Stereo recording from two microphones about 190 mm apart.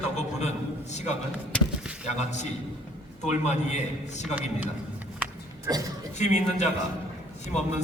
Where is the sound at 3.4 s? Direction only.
40° left (ahead or behind).